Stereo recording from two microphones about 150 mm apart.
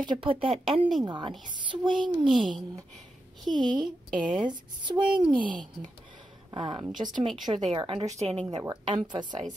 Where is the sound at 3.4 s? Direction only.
30° right (ahead or behind).